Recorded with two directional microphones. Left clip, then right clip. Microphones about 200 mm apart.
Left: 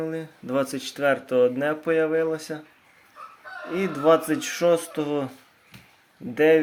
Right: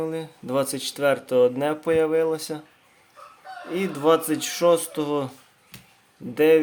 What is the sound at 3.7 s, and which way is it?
Speech, 15° right (ahead or behind).